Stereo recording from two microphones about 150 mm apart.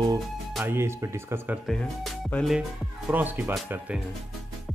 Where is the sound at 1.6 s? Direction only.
Centre (ahead or behind).